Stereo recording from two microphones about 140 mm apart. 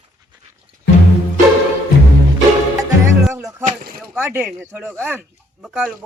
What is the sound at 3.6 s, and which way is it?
Boat, 90° right.